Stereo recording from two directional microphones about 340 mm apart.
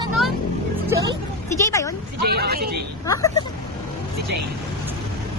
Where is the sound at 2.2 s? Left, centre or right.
Right.